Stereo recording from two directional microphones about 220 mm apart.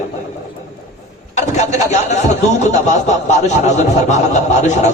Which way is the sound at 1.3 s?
30° left (ahead or behind).